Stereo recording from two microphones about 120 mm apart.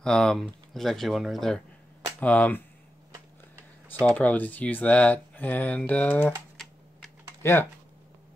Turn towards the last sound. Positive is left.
turn(degrees=20)  # may be behind; listen again after turning